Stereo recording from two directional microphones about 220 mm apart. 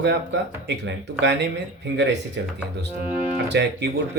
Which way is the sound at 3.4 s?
50° right (ahead or behind).